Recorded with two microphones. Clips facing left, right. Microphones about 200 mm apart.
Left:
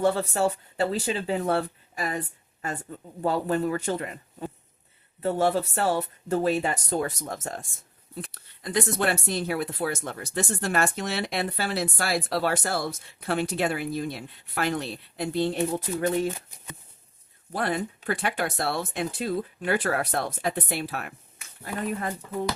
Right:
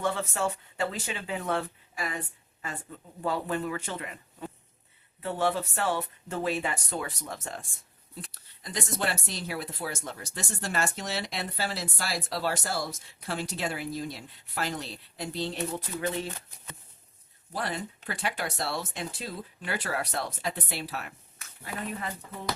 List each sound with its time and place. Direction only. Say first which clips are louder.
0.0 s speech: left 6 dB; 35° left (ahead or behind)
8.1 s speech: left 6 dB; 60° left (ahead or behind)
17.5 s speech: left 6 dB; 55° left (ahead or behind)